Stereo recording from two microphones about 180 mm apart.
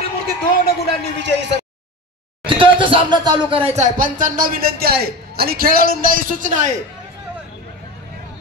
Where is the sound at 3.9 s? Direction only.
50° right (ahead or behind).